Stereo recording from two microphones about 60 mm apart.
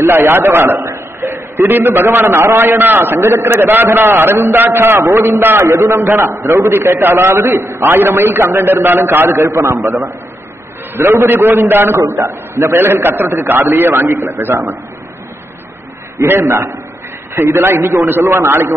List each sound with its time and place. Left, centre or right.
0.0 s a man's voice: right
0.7 s a sound: right
1.3 s a man's voice: right
16.2 s a man's voice: right